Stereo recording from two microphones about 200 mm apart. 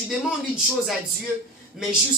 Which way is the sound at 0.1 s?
Centre (ahead or behind).